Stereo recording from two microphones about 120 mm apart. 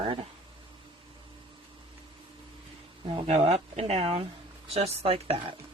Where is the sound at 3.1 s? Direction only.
55° right (ahead or behind).